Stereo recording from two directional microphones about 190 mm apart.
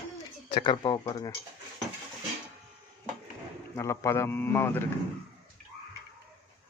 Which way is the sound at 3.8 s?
15° left (ahead or behind).